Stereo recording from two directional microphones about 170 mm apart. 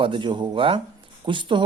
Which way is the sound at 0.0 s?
30° right (ahead or behind).